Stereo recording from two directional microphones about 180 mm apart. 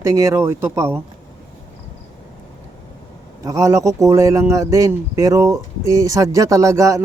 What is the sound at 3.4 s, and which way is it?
A man's voice, 20° right (ahead or behind).